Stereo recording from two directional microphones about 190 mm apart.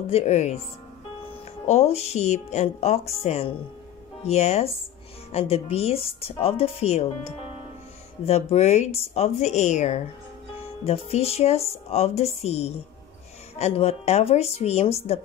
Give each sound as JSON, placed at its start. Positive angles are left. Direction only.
{"t": 0.0, "sound": "speech", "side_deg": 35}
{"t": 1.7, "sound": "speech", "side_deg": 35}